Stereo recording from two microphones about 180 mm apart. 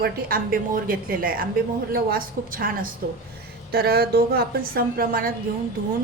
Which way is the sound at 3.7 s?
60° right (ahead or behind).